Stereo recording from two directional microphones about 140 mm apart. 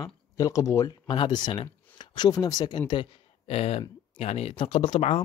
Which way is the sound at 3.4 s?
45° left (ahead or behind).